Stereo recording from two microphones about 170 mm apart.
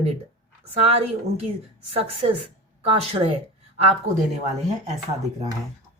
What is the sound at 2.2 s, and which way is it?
Speech, 35° right (ahead or behind).